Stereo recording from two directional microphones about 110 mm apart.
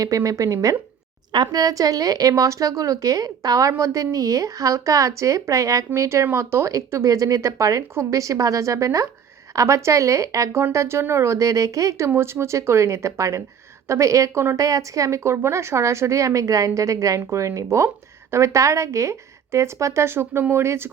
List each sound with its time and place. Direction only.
0.0 s a woman's voice: 30° right (ahead or behind)